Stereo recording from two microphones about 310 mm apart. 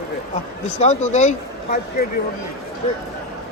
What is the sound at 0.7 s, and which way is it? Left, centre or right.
Speech, left.